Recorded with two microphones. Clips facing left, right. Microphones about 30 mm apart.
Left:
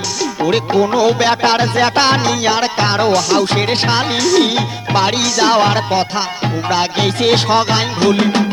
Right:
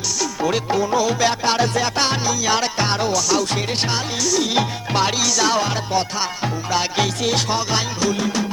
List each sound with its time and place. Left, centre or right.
0.8 s music: left
1.8 s music: left
2.6 s music: left
4.5 s music: left
7.2 s music: left